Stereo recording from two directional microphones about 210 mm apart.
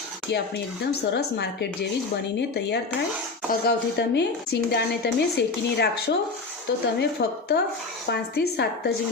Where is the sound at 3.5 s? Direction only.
50° left (ahead or behind).